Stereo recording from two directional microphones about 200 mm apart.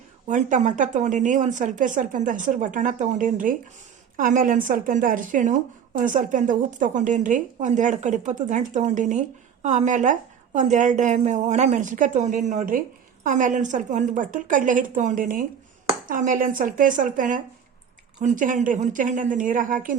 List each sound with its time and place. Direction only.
0.3 s a woman's voice: 40° right (ahead or behind)